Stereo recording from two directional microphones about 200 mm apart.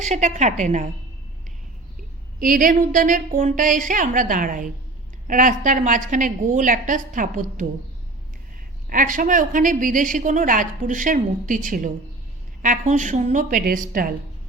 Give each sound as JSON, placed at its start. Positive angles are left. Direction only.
{"t": 0.0, "sound": "a woman's voice", "side_deg": -35}
{"t": 2.4, "sound": "a woman's voice", "side_deg": -45}
{"t": 8.9, "sound": "a woman's voice", "side_deg": -40}